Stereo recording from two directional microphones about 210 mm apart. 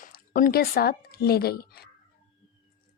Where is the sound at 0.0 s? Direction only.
40° left (ahead or behind).